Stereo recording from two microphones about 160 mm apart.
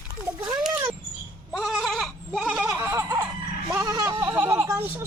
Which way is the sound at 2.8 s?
20° right (ahead or behind).